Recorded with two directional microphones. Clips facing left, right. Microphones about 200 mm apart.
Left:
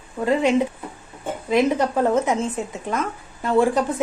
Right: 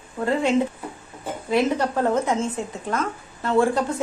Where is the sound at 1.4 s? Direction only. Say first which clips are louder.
Left 2 dB; 15° left (ahead or behind).